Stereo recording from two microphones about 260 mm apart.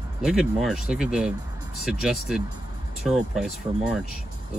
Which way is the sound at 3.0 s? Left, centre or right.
Centre.